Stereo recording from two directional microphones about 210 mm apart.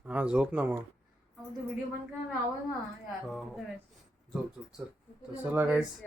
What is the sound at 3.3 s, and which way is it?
Speech, centre (ahead or behind).